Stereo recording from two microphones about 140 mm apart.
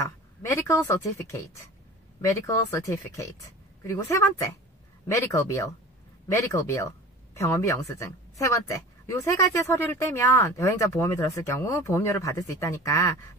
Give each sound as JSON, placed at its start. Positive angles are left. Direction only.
{"t": 0.4, "sound": "a woman's voice", "side_deg": 20}